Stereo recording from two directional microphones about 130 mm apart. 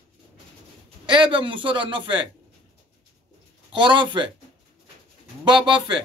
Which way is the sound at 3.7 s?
35° right (ahead or behind).